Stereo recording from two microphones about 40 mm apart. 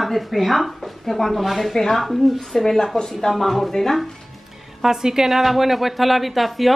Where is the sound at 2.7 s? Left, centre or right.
Centre.